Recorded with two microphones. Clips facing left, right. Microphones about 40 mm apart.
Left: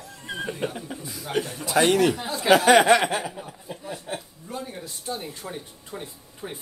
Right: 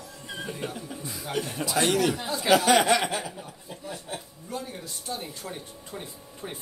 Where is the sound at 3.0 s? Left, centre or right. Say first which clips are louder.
Left 4 dB; centre.